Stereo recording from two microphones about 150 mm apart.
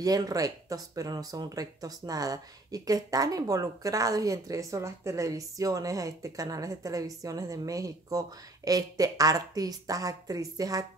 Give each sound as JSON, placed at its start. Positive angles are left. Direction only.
{"t": 0.0, "sound": "speech", "side_deg": -25}